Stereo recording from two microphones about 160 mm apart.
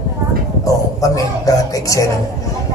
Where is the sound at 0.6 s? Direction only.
20° left (ahead or behind).